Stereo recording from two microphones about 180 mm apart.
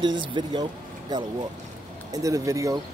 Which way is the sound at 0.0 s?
25° right (ahead or behind).